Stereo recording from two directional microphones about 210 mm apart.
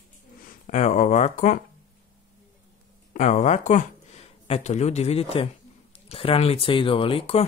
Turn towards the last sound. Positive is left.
turn(degrees=25)  # may be behind; listen again after turning